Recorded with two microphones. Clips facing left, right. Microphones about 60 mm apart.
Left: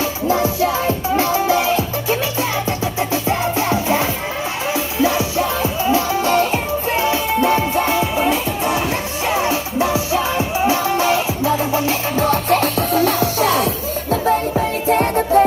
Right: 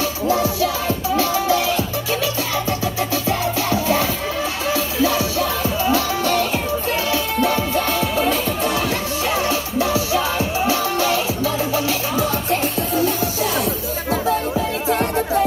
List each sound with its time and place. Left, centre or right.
0.3 s music: left
12.2 s music: left
14.9 s music: left